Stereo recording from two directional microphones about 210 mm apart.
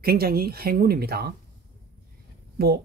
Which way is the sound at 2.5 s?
50° right (ahead or behind).